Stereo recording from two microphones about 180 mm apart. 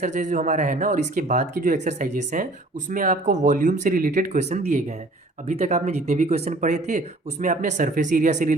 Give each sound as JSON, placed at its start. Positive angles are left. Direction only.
{"t": 0.0, "sound": "speech", "side_deg": -45}